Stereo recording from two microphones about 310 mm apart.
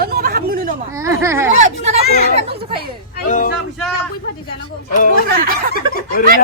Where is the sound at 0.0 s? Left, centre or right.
Right.